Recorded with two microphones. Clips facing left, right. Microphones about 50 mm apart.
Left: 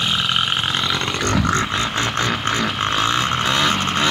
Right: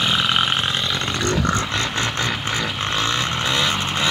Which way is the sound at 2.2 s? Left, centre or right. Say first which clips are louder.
Left 3 dB; left.